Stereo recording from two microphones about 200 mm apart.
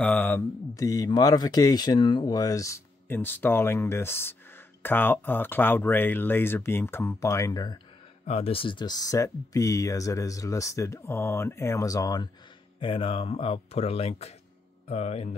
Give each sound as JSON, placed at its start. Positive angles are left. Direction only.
{"t": 0.0, "sound": "speech", "side_deg": 10}